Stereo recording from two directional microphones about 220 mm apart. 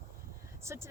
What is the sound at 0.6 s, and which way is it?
Speech, 10° right (ahead or behind).